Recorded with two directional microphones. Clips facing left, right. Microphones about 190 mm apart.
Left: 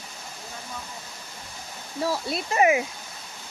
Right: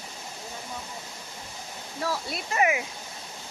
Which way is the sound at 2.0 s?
30° left (ahead or behind).